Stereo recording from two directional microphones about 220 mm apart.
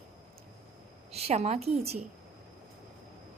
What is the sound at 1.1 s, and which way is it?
Speech, 30° right (ahead or behind).